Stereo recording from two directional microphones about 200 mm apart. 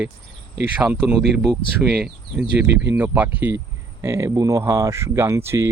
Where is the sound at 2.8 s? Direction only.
10° right (ahead or behind).